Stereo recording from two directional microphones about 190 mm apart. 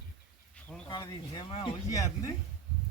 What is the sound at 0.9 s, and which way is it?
Speech, 20° left (ahead or behind).